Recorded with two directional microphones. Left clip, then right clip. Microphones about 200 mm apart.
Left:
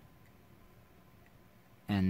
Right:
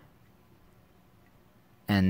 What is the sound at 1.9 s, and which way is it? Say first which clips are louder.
Speech: right 8 dB; 40° right (ahead or behind).